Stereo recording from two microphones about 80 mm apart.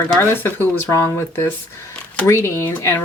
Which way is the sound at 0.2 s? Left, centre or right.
Left.